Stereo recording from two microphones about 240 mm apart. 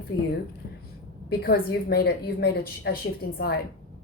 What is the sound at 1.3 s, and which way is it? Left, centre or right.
A woman's voice, left.